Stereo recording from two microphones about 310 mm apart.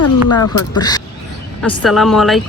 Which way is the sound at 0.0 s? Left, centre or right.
Left.